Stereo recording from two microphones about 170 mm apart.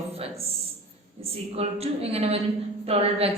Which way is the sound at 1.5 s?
35° right (ahead or behind).